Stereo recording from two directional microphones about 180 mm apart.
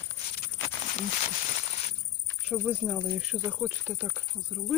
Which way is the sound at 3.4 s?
10° right (ahead or behind).